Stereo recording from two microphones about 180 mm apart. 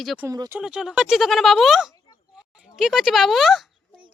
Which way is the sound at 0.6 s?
5° right (ahead or behind).